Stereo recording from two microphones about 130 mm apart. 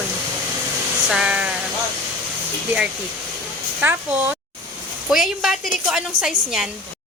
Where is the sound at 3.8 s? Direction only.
15° right (ahead or behind).